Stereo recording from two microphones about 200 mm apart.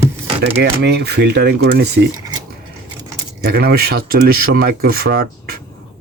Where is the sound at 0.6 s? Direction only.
55° right (ahead or behind).